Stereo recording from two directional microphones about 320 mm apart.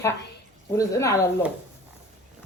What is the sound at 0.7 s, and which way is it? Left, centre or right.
Speech, centre.